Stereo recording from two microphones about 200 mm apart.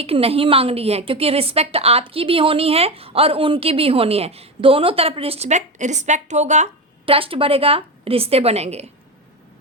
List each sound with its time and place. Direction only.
0.0 s a woman's voice: 30° right (ahead or behind)